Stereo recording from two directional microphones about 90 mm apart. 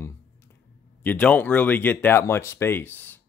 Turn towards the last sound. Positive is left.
turn(degrees=20)  # may be behind; listen again after turning